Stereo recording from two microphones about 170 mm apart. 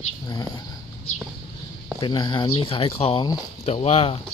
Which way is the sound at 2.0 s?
25° left (ahead or behind).